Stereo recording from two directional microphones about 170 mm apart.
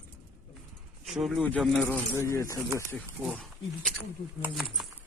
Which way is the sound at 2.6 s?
15° right (ahead or behind).